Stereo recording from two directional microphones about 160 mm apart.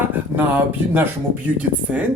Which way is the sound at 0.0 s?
10° right (ahead or behind).